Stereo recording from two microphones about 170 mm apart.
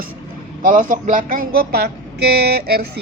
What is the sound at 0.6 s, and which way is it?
Speech, 50° right (ahead or behind).